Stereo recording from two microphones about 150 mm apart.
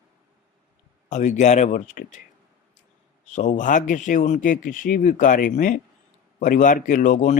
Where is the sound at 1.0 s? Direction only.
55° left (ahead or behind).